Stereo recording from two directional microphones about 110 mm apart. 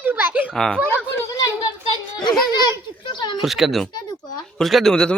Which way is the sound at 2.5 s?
45° left (ahead or behind).